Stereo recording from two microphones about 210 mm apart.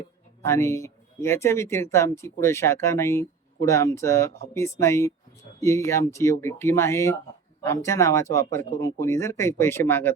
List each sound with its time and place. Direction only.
0.4 s speech: 15° left (ahead or behind)